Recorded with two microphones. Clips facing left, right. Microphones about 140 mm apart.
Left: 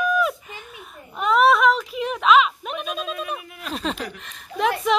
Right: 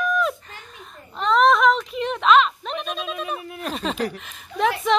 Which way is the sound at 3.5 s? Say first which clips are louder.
Right 3 dB; 45° right (ahead or behind).